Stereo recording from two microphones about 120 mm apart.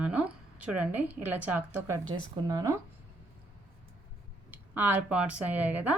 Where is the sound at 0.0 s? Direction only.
10° right (ahead or behind).